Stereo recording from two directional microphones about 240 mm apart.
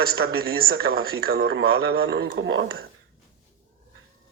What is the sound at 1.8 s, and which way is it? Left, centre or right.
Speech, right.